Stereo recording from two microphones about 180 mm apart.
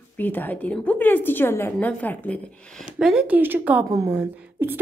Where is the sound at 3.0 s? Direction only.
5° right (ahead or behind).